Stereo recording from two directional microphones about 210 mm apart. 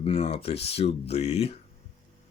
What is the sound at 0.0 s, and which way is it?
Speech, 25° left (ahead or behind).